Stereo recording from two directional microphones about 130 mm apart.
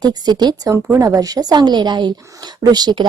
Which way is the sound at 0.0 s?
35° right (ahead or behind).